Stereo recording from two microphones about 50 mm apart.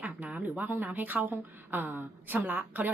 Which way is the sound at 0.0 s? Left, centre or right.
Right.